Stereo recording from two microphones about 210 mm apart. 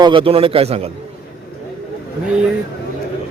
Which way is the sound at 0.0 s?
25° right (ahead or behind).